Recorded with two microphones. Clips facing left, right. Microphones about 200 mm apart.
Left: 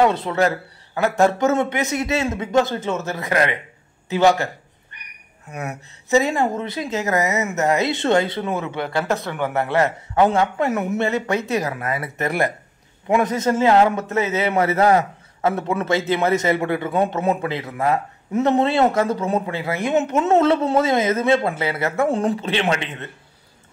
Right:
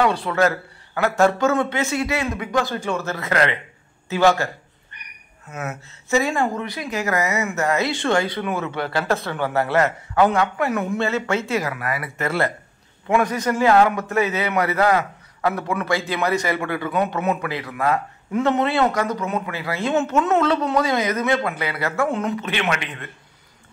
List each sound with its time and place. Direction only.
0.0 s a man's voice: 20° left (ahead or behind)
5.5 s a man's voice: 15° left (ahead or behind)